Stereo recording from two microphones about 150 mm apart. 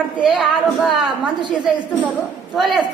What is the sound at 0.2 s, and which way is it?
A woman's voice, 5° right (ahead or behind).